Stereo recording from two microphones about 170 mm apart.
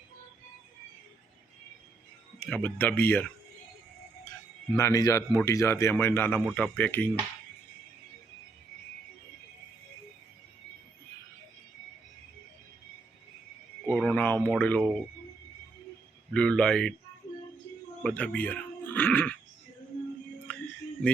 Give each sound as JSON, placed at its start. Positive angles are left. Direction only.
{"t": 2.5, "sound": "speech", "side_deg": 10}
{"t": 4.8, "sound": "speech", "side_deg": 20}
{"t": 13.8, "sound": "a sound", "side_deg": 5}
{"t": 14.6, "sound": "speech", "side_deg": 10}
{"t": 16.3, "sound": "a man's voice", "side_deg": 5}
{"t": 18.0, "sound": "speech", "side_deg": 5}
{"t": 20.5, "sound": "music", "side_deg": 10}